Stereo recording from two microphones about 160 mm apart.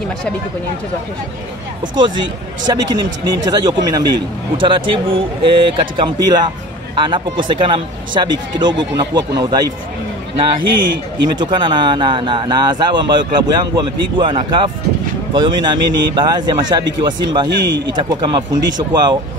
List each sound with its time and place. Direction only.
2.6 s speech: 25° right (ahead or behind)
11.2 s speech: 30° right (ahead or behind)